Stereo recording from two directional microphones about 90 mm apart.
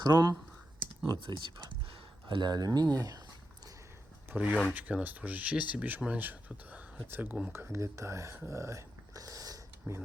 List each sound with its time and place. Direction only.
0.0 s speech: 50° right (ahead or behind)
4.4 s speech: 15° right (ahead or behind); by 8.4 s 35° right (ahead or behind)
8.4 s a sound: 35° right (ahead or behind)